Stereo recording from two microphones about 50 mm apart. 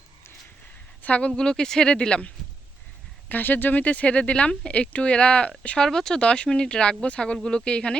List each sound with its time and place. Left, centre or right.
1.0 s speech: left
1.4 s speech: centre
3.2 s speech: left
5.8 s speech: centre